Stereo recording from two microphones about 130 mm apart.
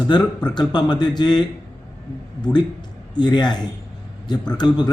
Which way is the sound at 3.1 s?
35° left (ahead or behind).